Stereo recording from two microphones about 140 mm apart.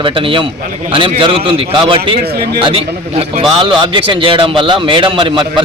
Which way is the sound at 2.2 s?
90° right.